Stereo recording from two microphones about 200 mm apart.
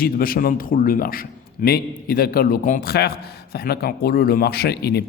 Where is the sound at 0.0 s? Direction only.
45° left (ahead or behind).